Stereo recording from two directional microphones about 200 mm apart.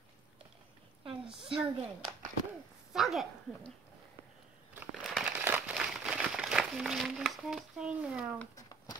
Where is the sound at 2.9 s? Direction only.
Centre (ahead or behind).